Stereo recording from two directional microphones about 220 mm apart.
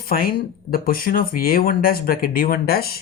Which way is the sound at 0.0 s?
40° left (ahead or behind).